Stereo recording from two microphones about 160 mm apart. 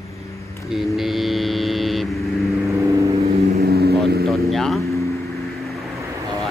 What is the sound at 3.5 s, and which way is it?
Vehicle, 75° right (ahead or behind).